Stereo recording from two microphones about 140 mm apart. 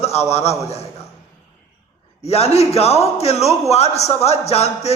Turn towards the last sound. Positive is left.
turn(degrees=50)  # may be behind; listen again after turning